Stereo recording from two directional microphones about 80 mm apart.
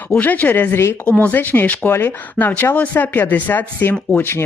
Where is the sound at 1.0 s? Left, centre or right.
Centre.